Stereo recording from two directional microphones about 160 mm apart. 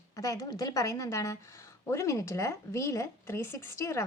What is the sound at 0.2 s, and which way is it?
A woman's voice, 20° left (ahead or behind).